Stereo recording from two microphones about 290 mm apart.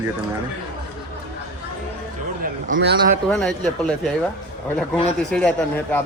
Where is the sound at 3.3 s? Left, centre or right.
Centre.